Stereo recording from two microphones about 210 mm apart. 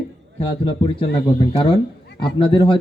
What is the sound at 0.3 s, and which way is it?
A man's voice, 25° left (ahead or behind).